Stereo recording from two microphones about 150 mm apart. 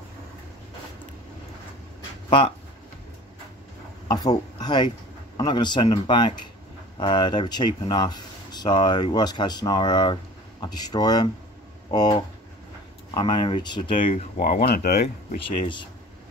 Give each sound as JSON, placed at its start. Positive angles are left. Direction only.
{"t": 2.2, "sound": "speech", "side_deg": 35}
{"t": 4.1, "sound": "speech", "side_deg": 25}
{"t": 13.9, "sound": "speech", "side_deg": 60}
{"t": 14.7, "sound": "speech", "side_deg": 90}
{"t": 15.6, "sound": "speech", "side_deg": 30}